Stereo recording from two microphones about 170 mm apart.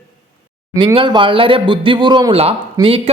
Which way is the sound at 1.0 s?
30° right (ahead or behind).